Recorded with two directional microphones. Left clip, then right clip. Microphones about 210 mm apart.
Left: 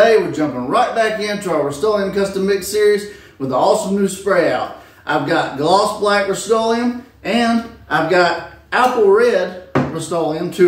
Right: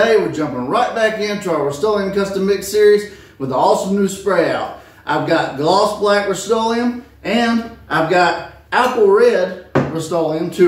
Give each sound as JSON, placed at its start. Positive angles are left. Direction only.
{"t": 0.0, "sound": "a man's voice", "side_deg": 5}